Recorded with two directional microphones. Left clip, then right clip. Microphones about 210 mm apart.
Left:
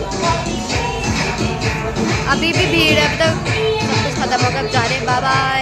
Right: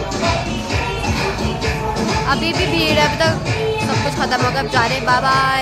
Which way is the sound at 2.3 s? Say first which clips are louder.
Left 4 dB; 15° left (ahead or behind).